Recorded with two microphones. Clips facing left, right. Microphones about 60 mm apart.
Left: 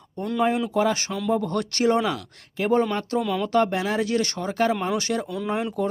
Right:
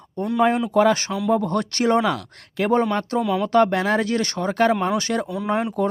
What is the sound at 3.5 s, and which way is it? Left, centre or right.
Speech, right.